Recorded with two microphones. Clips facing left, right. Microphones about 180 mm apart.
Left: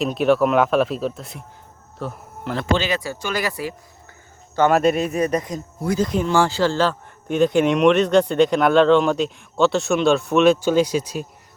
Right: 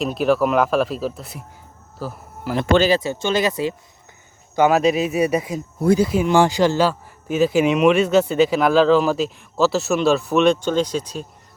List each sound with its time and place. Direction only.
0.0 s speech: centre (ahead or behind)
2.9 s speech: 25° right (ahead or behind)
4.5 s speech: 5° right (ahead or behind)